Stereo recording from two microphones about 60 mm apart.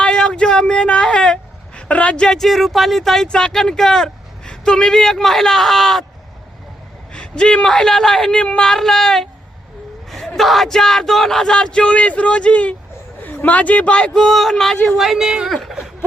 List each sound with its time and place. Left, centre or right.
0.0 s speech: centre
7.1 s speech: centre
14.2 s speech: centre
14.9 s speech: centre
15.7 s a sound: centre